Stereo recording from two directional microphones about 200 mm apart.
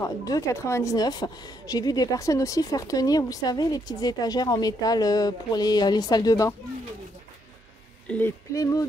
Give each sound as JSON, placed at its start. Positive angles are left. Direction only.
{"t": 0.0, "sound": "speech", "side_deg": 15}
{"t": 8.1, "sound": "speech", "side_deg": 10}